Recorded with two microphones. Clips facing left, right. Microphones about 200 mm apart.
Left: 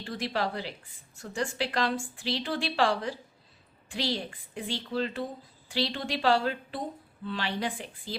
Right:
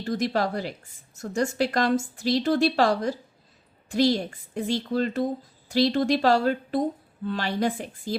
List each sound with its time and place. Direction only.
0.0 s speech: 40° right (ahead or behind)